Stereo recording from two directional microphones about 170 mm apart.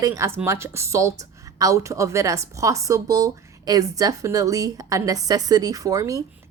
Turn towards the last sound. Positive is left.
turn(degrees=-20)  # may be behind; listen again after turning